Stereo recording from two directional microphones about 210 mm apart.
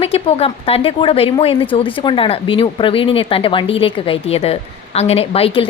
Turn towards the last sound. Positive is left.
turn(degrees=25)  # may be behind; listen again after turning